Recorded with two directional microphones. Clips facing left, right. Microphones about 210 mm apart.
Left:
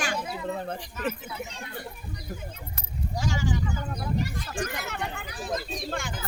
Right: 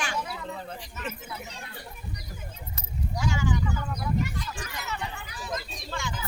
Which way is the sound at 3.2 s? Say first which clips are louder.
Right 1 dB; 35° left (ahead or behind).